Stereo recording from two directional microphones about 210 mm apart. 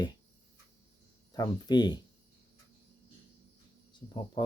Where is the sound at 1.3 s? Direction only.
20° left (ahead or behind).